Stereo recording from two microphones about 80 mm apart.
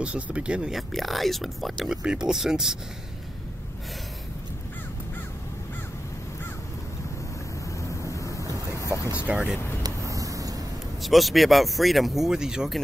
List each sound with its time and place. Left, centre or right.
0.0 s speech: centre
0.7 s speech: centre
8.0 s waves: left
9.2 s speech: centre
9.8 s vehicle: right
11.0 s speech: centre